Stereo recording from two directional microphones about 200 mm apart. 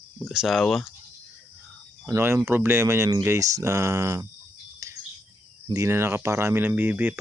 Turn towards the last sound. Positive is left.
turn(degrees=-10)  # may be behind; listen again after turning